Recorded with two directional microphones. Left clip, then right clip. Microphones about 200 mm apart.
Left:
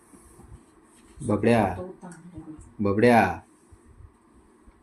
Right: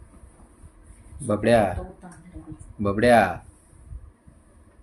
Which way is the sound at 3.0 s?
10° right (ahead or behind).